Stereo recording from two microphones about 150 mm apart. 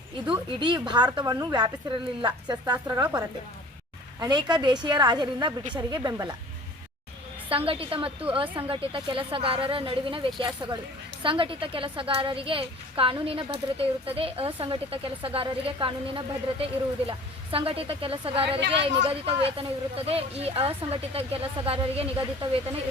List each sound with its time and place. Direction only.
0.3 s a woman's voice: 30° right (ahead or behind)
7.5 s a woman's voice: 35° right (ahead or behind)